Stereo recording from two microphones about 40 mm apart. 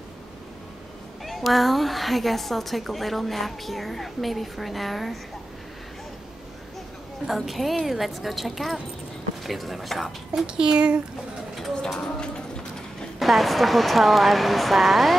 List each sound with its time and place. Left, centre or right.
1.2 s a woman's voice: centre
7.2 s a woman's voice: centre
10.4 s speech: right
11.7 s a sound: centre
13.2 s a woman's voice: centre